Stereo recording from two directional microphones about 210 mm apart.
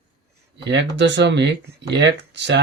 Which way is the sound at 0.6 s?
55° right (ahead or behind).